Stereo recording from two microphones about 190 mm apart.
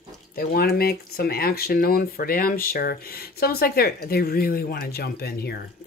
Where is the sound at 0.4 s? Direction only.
50° left (ahead or behind).